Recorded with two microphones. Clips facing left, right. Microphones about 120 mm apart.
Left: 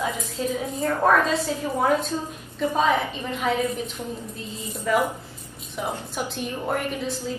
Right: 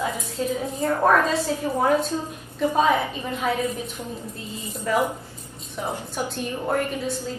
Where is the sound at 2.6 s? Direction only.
10° right (ahead or behind).